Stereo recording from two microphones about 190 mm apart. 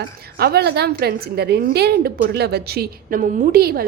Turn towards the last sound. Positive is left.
turn(degrees=-55)  # may be behind; listen again after turning